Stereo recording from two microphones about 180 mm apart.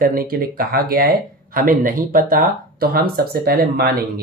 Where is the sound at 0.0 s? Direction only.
55° right (ahead or behind).